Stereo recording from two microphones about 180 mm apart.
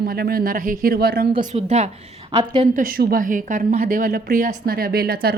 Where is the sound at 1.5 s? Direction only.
40° right (ahead or behind).